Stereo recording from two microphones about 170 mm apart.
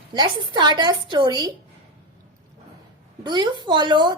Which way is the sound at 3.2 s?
25° right (ahead or behind).